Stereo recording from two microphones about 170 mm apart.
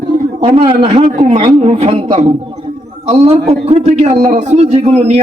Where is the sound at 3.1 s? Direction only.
35° right (ahead or behind).